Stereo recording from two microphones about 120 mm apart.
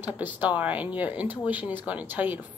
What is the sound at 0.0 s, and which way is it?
A woman's voice, 15° right (ahead or behind).